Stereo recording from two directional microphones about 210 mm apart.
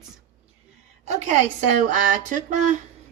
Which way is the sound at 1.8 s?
40° right (ahead or behind).